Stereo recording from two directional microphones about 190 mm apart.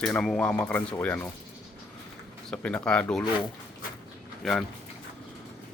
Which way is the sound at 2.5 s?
5° left (ahead or behind).